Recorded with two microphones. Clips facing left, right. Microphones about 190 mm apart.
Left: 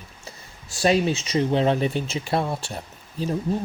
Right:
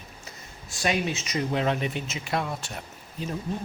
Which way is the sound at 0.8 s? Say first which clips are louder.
Left 7 dB; 30° left (ahead or behind).